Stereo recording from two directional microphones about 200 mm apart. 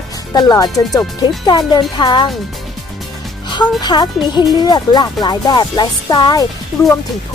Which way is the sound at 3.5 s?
20° left (ahead or behind).